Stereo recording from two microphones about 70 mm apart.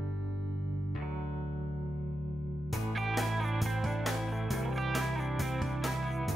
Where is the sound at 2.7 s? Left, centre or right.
Centre.